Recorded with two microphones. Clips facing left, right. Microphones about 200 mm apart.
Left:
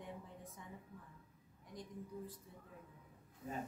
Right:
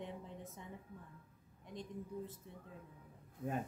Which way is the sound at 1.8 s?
25° right (ahead or behind).